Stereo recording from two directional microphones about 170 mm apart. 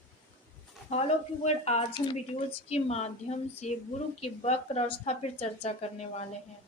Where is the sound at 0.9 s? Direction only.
40° left (ahead or behind).